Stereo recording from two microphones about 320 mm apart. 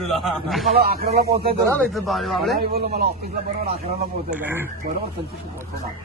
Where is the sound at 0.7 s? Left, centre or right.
Right.